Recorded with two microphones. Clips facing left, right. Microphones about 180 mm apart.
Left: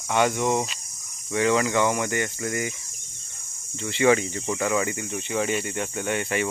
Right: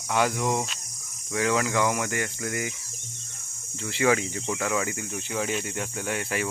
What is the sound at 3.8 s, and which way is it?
Speech, centre (ahead or behind).